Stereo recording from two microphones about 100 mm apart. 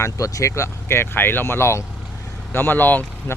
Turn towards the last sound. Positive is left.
turn(degrees=20)  # may be behind; listen again after turning